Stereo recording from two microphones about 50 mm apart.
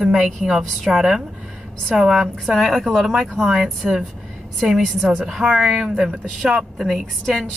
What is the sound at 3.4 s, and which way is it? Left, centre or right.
Speech, centre.